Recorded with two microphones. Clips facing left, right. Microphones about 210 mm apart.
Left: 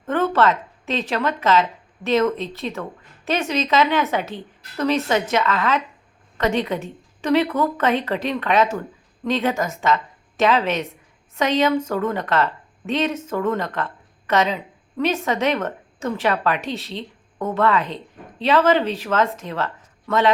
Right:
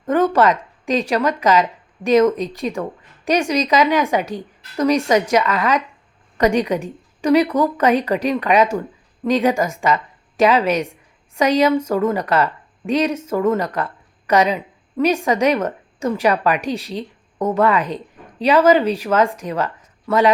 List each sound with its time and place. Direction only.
0.0 s a woman's voice: 10° right (ahead or behind)
17.8 s a sound: 40° right (ahead or behind)
18.4 s speech: 10° right (ahead or behind)